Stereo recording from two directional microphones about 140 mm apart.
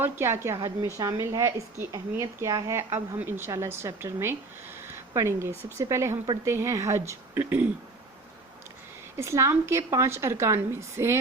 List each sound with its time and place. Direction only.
0.0 s a woman's voice: 20° right (ahead or behind)
9.1 s a woman's voice: 20° right (ahead or behind)